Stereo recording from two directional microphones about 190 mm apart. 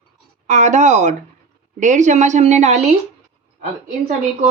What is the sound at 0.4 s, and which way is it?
Speech, 40° right (ahead or behind).